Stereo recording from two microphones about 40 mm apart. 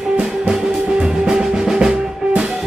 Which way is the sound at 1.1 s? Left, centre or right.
Centre.